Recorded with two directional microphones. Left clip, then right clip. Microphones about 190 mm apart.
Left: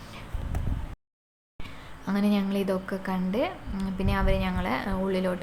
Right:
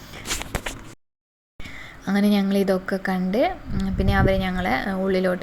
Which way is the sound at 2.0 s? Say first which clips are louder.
Right 6 dB; 25° right (ahead or behind).